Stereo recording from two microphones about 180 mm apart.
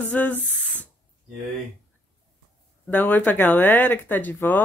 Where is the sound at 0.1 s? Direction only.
10° left (ahead or behind).